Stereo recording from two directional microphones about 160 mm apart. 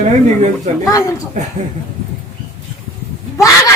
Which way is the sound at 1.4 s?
50° right (ahead or behind).